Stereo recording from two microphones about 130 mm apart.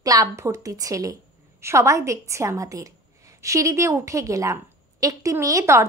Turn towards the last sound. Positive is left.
turn(degrees=-25)  # may be behind; listen again after turning